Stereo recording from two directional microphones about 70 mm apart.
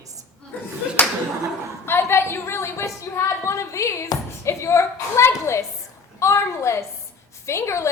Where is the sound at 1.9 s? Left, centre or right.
Left.